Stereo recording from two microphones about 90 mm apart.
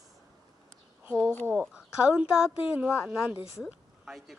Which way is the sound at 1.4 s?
15° right (ahead or behind).